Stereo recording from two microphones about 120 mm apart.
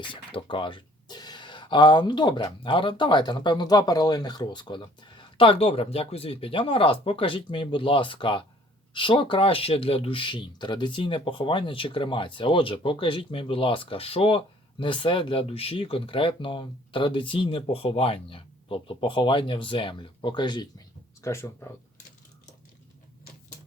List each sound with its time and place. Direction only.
0.0 s speech: 45° left (ahead or behind)
21.2 s speech: 25° left (ahead or behind)